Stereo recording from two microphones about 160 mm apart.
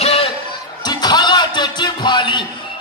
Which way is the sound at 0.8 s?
25° left (ahead or behind).